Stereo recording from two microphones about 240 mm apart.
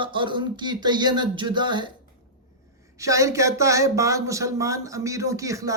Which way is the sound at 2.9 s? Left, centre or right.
Centre.